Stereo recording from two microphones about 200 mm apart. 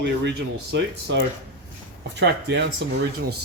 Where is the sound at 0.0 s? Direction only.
60° right (ahead or behind).